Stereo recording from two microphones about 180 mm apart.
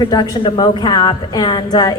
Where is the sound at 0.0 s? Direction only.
25° left (ahead or behind).